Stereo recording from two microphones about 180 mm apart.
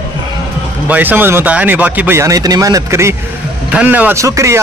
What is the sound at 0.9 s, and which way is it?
A man's voice, 10° right (ahead or behind).